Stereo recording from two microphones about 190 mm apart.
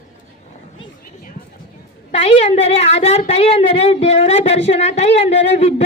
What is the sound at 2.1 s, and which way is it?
Speech, 30° left (ahead or behind).